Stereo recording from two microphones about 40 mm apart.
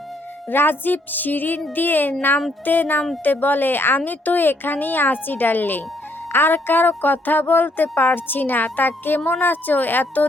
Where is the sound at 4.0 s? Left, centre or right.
Left.